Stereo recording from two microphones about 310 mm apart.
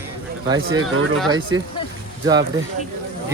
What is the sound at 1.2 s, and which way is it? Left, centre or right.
Speech, centre.